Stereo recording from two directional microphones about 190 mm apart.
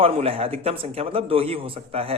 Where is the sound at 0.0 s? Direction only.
30° right (ahead or behind).